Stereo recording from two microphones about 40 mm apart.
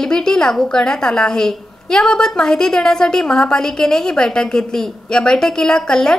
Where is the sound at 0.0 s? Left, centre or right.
Centre.